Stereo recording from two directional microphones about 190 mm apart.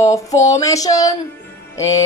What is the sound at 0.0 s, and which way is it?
A woman's voice, 15° left (ahead or behind).